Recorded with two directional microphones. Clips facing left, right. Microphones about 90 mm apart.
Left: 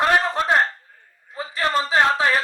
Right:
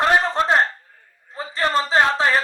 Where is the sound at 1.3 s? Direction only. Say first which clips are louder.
Right 1 dB; 35° right (ahead or behind).